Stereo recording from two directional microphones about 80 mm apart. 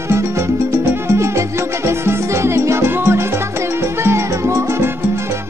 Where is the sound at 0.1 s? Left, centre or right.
Right.